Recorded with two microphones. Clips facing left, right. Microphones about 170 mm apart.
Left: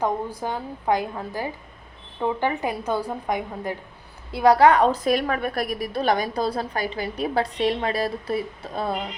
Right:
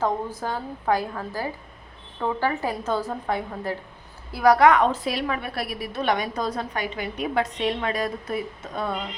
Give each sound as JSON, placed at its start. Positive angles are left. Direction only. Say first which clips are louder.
{"t": 0.0, "sound": "a woman's voice", "louder": "even", "side_deg": 15}
{"t": 4.3, "sound": "a woman's voice", "louder": "left 1 dB", "side_deg": 25}